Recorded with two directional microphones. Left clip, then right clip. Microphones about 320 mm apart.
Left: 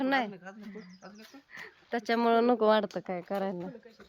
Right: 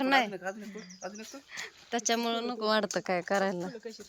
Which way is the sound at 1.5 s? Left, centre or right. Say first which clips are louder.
Right 1 dB; centre.